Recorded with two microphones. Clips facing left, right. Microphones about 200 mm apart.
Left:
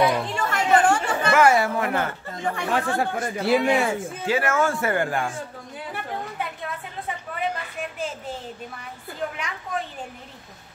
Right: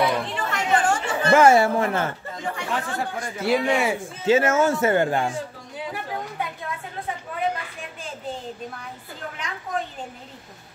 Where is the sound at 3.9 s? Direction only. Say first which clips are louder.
Right 4 dB; 20° right (ahead or behind).